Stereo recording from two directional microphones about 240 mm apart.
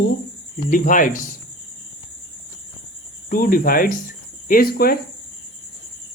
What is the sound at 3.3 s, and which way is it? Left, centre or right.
Speech, left.